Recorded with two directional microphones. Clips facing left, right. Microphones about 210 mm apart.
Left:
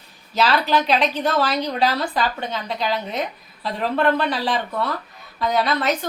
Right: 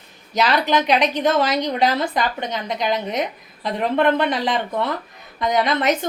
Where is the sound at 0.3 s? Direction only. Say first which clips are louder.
Right 1 dB; 15° right (ahead or behind).